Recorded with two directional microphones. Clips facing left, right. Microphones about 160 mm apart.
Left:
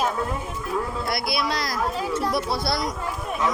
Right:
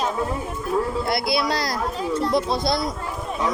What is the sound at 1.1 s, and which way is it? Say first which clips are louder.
A woman's voice: right 3 dB; 25° right (ahead or behind).